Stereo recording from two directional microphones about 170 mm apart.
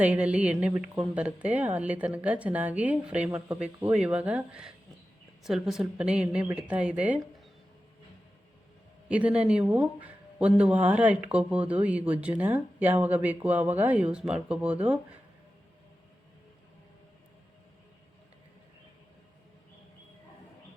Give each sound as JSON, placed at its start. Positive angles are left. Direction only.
{"t": 0.0, "sound": "a woman's voice", "side_deg": -5}
{"t": 9.0, "sound": "speech", "side_deg": -5}